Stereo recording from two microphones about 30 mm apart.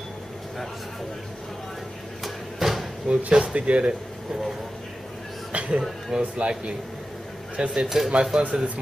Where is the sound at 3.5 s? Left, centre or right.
Right.